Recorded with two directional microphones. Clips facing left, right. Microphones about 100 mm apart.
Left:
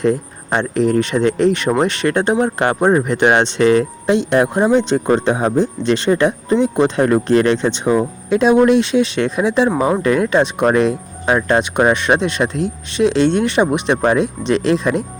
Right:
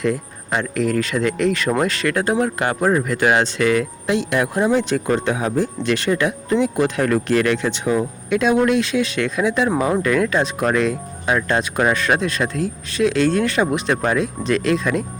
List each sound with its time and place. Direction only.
0.0 s speech: 30° left (ahead or behind)
9.6 s speech: 20° left (ahead or behind)